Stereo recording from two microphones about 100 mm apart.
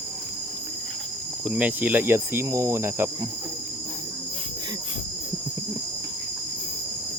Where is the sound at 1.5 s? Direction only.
15° right (ahead or behind).